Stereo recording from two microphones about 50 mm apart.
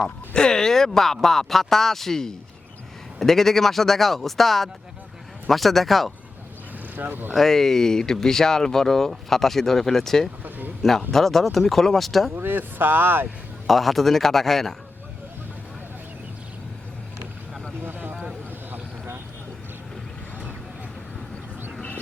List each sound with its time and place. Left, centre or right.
0.0 s speech: centre
6.9 s speech: right
7.3 s speech: centre
12.3 s speech: right
13.7 s speech: centre
17.8 s vehicle: right